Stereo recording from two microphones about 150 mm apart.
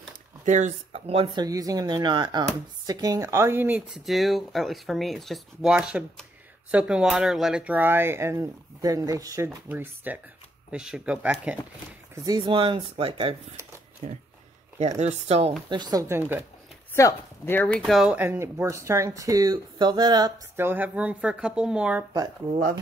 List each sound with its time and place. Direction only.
0.5 s speech: 50° right (ahead or behind); by 4.0 s 10° right (ahead or behind)
4.0 s speech: centre (ahead or behind)
12.3 s speech: 30° right (ahead or behind)
14.0 s speech: 55° right (ahead or behind)
15.7 s speech: 25° right (ahead or behind)
16.9 s speech: 15° left (ahead or behind); by 18.1 s centre (ahead or behind)
18.1 s speech: 15° right (ahead or behind); by 20.3 s 30° right (ahead or behind)
20.5 s speech: 15° right (ahead or behind)